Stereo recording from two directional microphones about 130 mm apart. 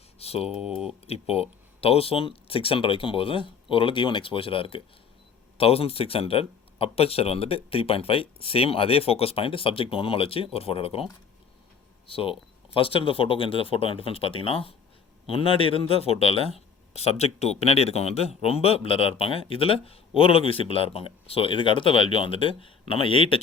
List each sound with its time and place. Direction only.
0.2 s a sound: 50° left (ahead or behind)
0.5 s speech: 5° right (ahead or behind)
1.0 s speech: 50° left (ahead or behind)